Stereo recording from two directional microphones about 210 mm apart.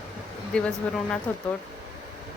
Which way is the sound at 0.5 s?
5° left (ahead or behind).